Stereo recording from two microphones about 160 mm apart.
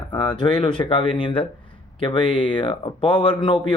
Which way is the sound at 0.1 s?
30° left (ahead or behind).